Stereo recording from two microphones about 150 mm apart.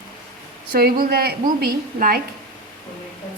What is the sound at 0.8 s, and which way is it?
A woman's voice, 90° right.